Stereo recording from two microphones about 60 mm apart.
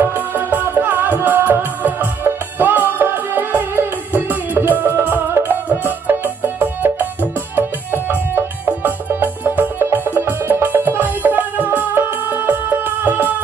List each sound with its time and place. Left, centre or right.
0.0 s music: right